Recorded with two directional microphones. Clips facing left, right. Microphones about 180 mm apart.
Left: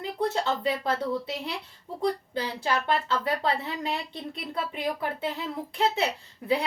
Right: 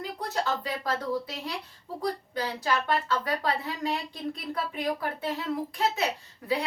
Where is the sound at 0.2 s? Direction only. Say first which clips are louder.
Left 4 dB; 25° left (ahead or behind).